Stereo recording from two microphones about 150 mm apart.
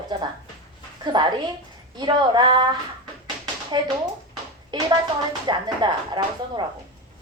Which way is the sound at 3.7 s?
30° right (ahead or behind).